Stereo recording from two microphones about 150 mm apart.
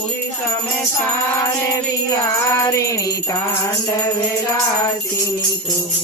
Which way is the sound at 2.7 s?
20° left (ahead or behind).